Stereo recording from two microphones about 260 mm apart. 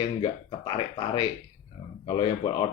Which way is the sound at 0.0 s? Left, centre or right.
Centre.